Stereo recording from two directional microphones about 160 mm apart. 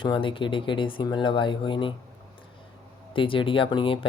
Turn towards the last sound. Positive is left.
turn(degrees=30)  # may be behind; listen again after turning